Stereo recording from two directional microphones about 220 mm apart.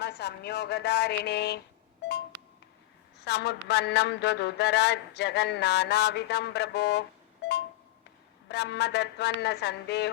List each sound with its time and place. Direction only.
0.0 s speech: 50° left (ahead or behind)
3.2 s a man's voice: 50° left (ahead or behind)
8.4 s a man's voice: 50° left (ahead or behind)